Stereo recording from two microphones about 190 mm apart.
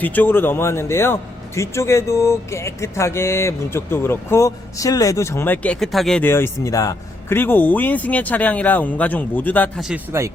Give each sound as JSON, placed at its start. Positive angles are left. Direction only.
{"t": 0.0, "sound": "a man's voice", "side_deg": 10}
{"t": 9.8, "sound": "speech", "side_deg": -10}